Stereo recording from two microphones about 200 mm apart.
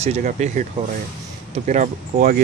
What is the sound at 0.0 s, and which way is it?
Speech, 35° right (ahead or behind).